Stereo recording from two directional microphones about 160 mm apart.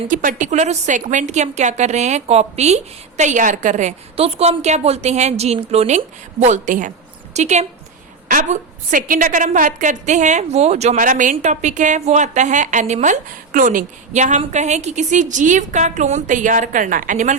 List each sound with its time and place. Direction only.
0.1 s a woman's voice: 55° right (ahead or behind)
8.3 s a woman's voice: 60° right (ahead or behind)